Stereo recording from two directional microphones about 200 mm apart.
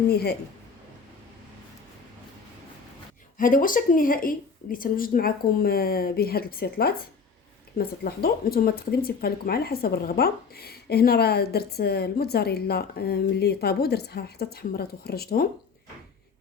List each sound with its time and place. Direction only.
0.1 s speech: 55° left (ahead or behind)
3.3 s speech: 40° left (ahead or behind)